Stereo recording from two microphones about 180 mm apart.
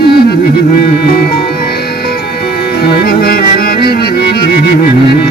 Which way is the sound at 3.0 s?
55° left (ahead or behind).